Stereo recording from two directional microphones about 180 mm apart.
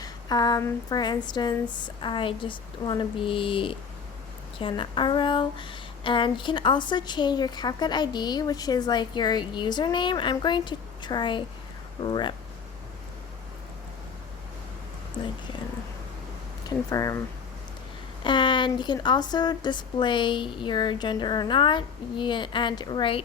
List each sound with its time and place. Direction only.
0.0 s speech: 20° left (ahead or behind)
16.6 s speech: 20° left (ahead or behind)
18.2 s speech: 25° left (ahead or behind)